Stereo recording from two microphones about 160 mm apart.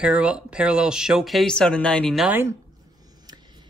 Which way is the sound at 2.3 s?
15° right (ahead or behind).